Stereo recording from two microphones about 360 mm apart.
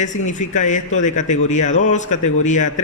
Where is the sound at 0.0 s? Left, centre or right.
Centre.